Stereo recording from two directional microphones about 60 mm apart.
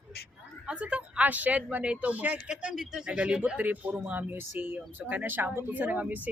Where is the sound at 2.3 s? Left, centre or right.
Centre; by 5.7 s right.